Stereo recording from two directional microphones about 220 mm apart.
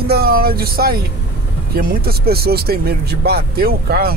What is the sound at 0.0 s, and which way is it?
Speech, 45° right (ahead or behind).